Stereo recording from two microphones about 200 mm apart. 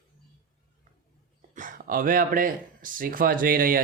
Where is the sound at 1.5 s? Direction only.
40° right (ahead or behind).